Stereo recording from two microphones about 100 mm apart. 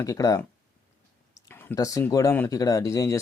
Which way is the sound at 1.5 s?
20° left (ahead or behind).